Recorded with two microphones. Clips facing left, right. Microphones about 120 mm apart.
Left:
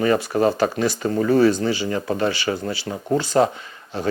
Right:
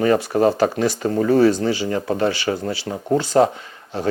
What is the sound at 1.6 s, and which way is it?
Speech, 50° right (ahead or behind).